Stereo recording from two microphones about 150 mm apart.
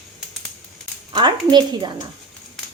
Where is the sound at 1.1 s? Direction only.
30° right (ahead or behind).